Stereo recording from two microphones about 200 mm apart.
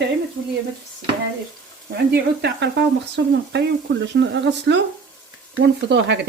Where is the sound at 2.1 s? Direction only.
55° right (ahead or behind).